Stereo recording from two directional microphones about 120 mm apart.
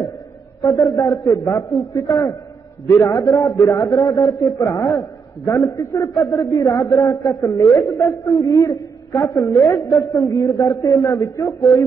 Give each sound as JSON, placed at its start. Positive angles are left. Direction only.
{"t": 0.6, "sound": "a man's voice", "side_deg": 25}